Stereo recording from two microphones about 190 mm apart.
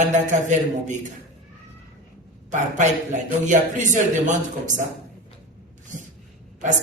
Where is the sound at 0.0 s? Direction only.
40° right (ahead or behind).